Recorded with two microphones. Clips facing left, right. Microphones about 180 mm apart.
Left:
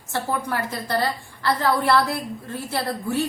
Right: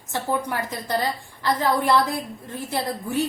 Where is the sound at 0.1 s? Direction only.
15° right (ahead or behind).